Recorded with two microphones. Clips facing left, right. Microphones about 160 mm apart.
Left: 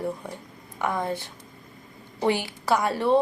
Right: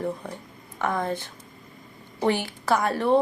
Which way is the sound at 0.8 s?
15° left (ahead or behind).